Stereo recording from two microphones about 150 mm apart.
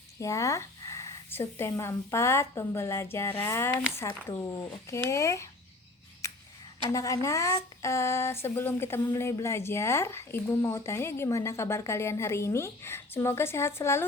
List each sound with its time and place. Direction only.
0.2 s speech: 20° left (ahead or behind)
6.9 s speech: 20° left (ahead or behind)